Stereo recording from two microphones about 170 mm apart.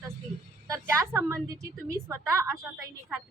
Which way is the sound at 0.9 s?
15° right (ahead or behind).